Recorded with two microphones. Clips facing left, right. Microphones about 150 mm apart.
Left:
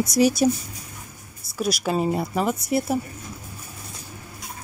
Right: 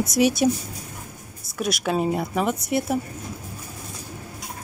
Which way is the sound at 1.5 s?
Centre (ahead or behind).